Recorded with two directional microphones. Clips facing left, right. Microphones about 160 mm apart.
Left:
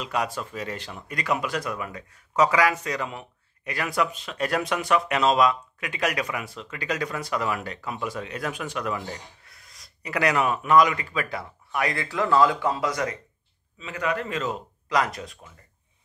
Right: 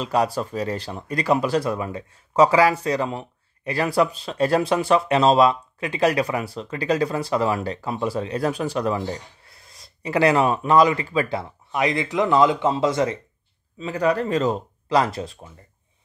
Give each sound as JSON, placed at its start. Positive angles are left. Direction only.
{"t": 0.0, "sound": "speech", "side_deg": -35}